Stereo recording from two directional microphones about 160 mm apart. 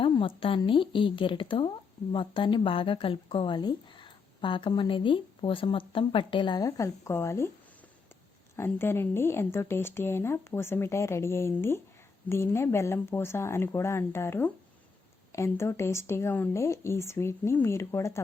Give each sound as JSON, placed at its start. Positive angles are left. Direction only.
{"t": 0.0, "sound": "a woman's voice", "side_deg": 35}
{"t": 8.5, "sound": "speech", "side_deg": 15}